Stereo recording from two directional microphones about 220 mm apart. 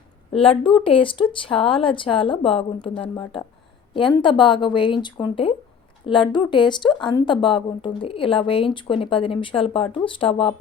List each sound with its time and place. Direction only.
0.6 s speech: 25° left (ahead or behind)